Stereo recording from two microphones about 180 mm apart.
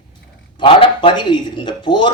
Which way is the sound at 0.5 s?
30° left (ahead or behind).